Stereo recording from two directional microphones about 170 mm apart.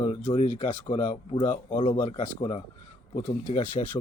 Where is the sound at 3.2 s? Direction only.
45° left (ahead or behind).